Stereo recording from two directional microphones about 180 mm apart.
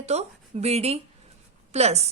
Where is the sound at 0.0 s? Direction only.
35° right (ahead or behind).